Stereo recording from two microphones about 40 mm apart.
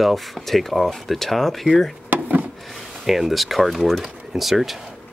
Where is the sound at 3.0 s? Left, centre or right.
Centre.